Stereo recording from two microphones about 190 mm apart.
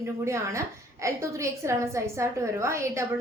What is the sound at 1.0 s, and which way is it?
A woman's voice, 15° right (ahead or behind).